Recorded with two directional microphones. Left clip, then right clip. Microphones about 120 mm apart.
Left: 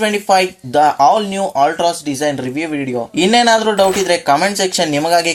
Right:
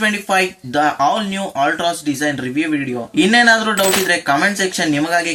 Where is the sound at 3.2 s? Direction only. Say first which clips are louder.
Even; 30° left (ahead or behind).